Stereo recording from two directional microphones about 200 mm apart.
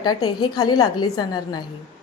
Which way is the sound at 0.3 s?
20° left (ahead or behind).